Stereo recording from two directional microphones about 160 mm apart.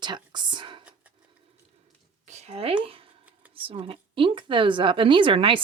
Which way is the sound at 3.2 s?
10° right (ahead or behind).